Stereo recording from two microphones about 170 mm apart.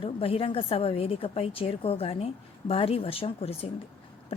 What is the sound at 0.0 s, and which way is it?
A woman's voice, 35° left (ahead or behind).